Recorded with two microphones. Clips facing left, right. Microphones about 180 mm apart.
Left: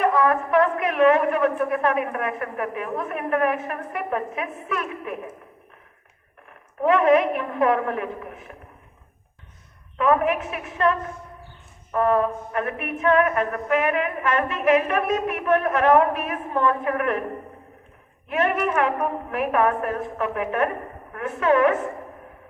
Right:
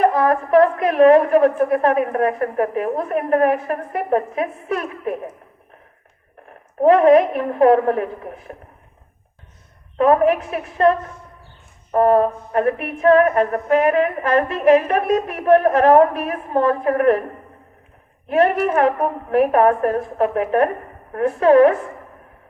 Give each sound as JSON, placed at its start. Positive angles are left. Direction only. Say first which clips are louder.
{"t": 0.0, "sound": "music", "louder": "right 4 dB", "side_deg": -35}
{"t": 6.7, "sound": "music", "louder": "right 6 dB", "side_deg": -35}
{"t": 10.0, "sound": "music", "louder": "right 6 dB", "side_deg": -35}
{"t": 18.3, "sound": "music", "louder": "right 6 dB", "side_deg": -35}